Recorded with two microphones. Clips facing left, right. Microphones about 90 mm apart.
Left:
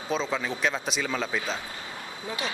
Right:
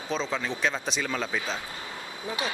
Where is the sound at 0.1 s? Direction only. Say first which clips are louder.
Left 1 dB; centre (ahead or behind).